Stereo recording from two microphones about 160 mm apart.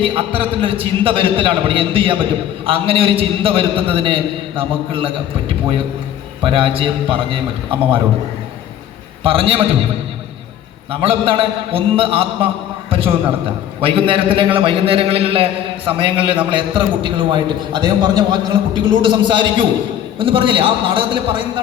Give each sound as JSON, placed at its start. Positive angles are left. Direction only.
{"t": 0.0, "sound": "a man's voice", "side_deg": -35}
{"t": 9.2, "sound": "a man's voice", "side_deg": -35}
{"t": 11.0, "sound": "a man's voice", "side_deg": -35}